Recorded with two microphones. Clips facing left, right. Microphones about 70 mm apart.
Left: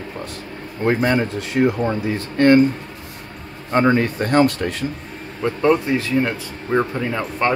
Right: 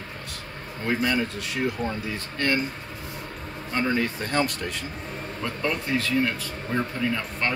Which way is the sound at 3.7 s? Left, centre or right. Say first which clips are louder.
Left 9 dB; left.